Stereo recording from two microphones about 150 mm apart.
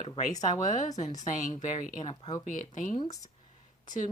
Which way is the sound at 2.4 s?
60° left (ahead or behind).